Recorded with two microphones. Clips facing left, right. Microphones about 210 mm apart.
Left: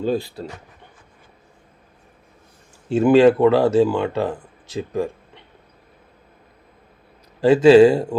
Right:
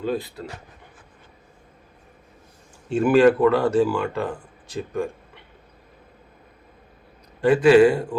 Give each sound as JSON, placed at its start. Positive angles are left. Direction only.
{"t": 0.0, "sound": "speech", "side_deg": 30}
{"t": 3.0, "sound": "speech", "side_deg": 25}
{"t": 7.4, "sound": "speech", "side_deg": 25}